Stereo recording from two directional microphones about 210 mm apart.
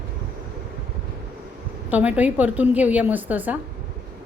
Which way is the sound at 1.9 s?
5° right (ahead or behind).